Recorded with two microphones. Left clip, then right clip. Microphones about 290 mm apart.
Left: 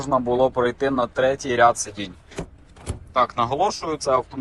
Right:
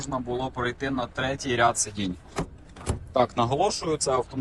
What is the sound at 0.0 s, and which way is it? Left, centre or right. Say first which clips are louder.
Speech: left 11 dB; centre.